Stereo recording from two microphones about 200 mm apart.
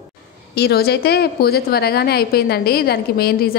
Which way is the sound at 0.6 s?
55° left (ahead or behind).